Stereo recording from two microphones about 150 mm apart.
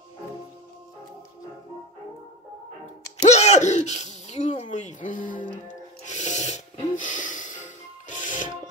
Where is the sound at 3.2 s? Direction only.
50° left (ahead or behind).